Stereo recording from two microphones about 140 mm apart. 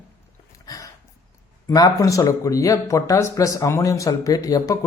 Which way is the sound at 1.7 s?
25° left (ahead or behind).